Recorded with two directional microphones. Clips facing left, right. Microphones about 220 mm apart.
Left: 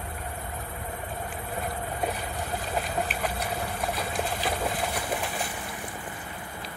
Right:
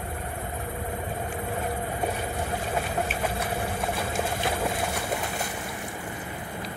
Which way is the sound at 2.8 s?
45° right (ahead or behind).